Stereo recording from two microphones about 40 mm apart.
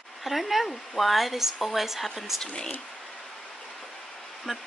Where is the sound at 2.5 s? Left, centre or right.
Left.